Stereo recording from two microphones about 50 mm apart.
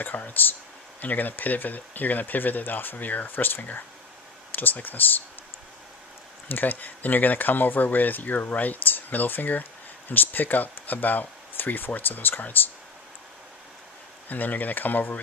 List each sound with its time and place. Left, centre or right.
0.0 s speech: left
6.5 s speech: left
14.3 s speech: left